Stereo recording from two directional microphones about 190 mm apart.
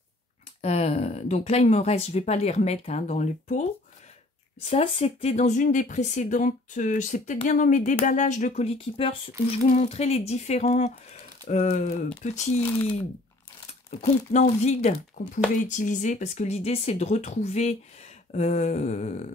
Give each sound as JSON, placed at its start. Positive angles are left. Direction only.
{"t": 0.6, "sound": "speech", "side_deg": 35}
{"t": 4.6, "sound": "speech", "side_deg": 30}
{"t": 13.8, "sound": "speech", "side_deg": 35}